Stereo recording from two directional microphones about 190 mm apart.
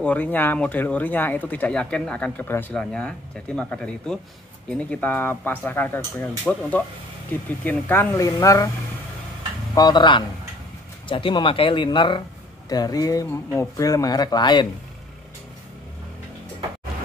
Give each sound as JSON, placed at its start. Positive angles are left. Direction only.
{"t": 0.0, "sound": "speech", "side_deg": 10}
{"t": 9.8, "sound": "speech", "side_deg": 20}